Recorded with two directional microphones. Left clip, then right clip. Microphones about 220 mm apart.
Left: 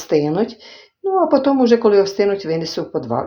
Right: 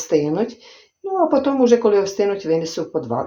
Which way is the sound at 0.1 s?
25° left (ahead or behind).